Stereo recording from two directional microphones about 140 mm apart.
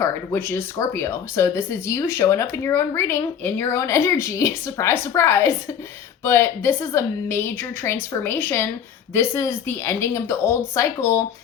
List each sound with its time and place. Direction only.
0.0 s a woman's voice: 15° left (ahead or behind)